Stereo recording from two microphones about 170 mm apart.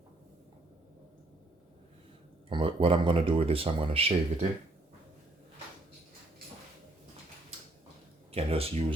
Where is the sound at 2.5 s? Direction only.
30° right (ahead or behind).